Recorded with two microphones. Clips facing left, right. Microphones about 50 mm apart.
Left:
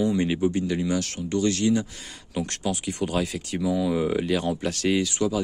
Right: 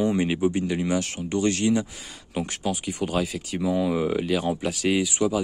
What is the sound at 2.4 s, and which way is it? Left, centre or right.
Speech, centre.